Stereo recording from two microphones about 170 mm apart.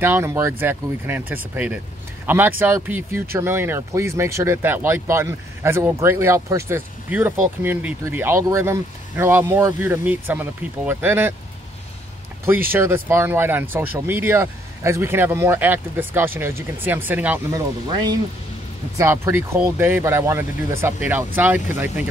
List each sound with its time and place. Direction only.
0.0 s speech: 15° right (ahead or behind)
12.4 s speech: 15° right (ahead or behind)
17.8 s speech: 25° right (ahead or behind)